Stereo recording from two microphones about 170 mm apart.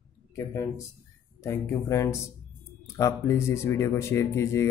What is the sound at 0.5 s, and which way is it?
Speech, 15° left (ahead or behind).